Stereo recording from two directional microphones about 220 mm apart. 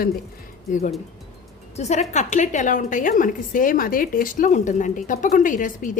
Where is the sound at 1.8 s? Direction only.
30° left (ahead or behind).